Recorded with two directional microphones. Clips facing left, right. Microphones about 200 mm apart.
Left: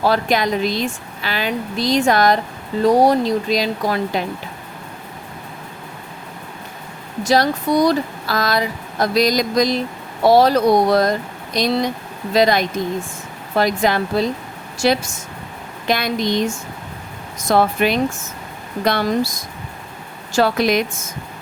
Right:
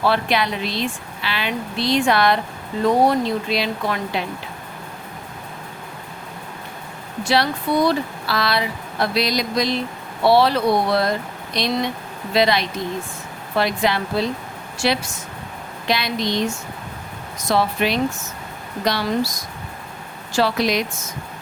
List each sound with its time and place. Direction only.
0.0 s speech: 40° left (ahead or behind)
7.3 s speech: 40° left (ahead or behind)
17.5 s speech: 50° left (ahead or behind)
20.3 s speech: 50° left (ahead or behind)